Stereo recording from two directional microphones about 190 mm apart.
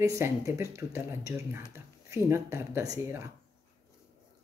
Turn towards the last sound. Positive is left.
turn(degrees=-15)  # may be behind; listen again after turning